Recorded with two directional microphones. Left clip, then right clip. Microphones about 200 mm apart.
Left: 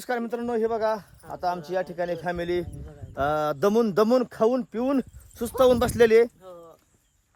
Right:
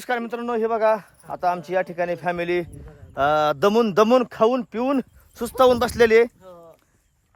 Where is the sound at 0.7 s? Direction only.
35° right (ahead or behind).